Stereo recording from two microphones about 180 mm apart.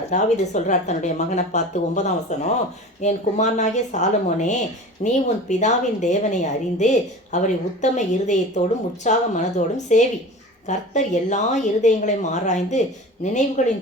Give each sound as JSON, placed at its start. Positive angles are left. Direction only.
{"t": 0.1, "sound": "a woman's voice", "side_deg": 40}